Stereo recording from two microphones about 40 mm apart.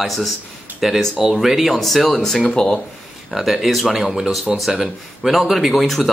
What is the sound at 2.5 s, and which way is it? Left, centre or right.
Speech, centre.